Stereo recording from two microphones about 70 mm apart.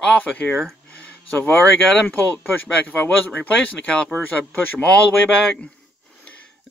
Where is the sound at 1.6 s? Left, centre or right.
Centre.